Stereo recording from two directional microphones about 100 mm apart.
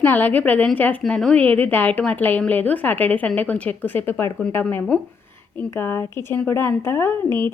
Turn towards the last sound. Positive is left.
turn(degrees=20)  # may be behind; listen again after turning